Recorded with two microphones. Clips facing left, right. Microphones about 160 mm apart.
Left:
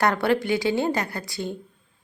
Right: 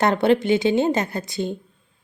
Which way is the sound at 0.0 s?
20° right (ahead or behind).